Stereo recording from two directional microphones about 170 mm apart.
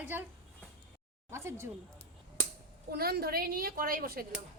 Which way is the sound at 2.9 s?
65° right (ahead or behind).